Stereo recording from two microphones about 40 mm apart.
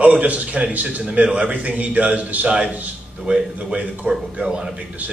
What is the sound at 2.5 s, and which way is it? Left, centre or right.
Speech, right.